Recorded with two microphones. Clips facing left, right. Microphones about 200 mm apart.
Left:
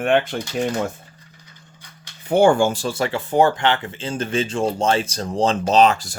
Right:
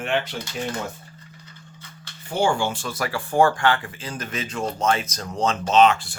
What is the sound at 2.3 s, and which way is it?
Speech, 55° left (ahead or behind).